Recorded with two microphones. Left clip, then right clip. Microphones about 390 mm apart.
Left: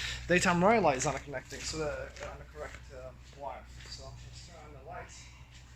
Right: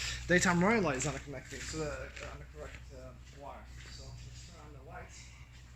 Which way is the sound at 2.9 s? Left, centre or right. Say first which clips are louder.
Left 5 dB; left.